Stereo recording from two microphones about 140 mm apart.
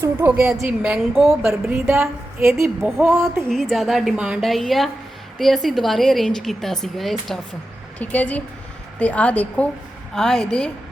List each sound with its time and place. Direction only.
0.0 s a woman's voice: 15° right (ahead or behind); by 1.4 s centre (ahead or behind)
1.4 s a woman's voice: 15° right (ahead or behind)
3.5 s a woman's voice: centre (ahead or behind)